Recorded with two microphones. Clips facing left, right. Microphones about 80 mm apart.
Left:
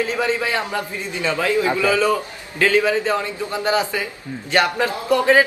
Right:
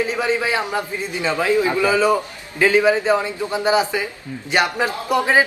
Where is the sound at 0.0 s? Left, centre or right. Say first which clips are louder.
Right 1 dB; centre.